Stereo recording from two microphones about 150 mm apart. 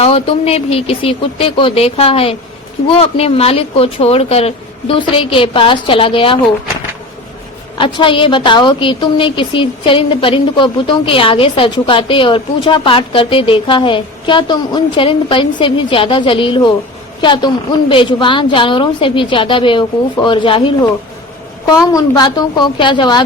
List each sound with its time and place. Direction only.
0.0 s a woman's voice: 40° left (ahead or behind)
7.8 s a woman's voice: 35° left (ahead or behind)
21.7 s a woman's voice: 25° left (ahead or behind)